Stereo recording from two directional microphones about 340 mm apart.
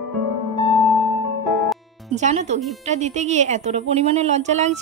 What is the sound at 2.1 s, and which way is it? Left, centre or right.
A woman's voice, centre.